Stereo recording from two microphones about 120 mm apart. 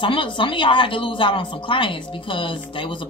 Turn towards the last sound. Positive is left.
turn(degrees=45)  # may be behind; listen again after turning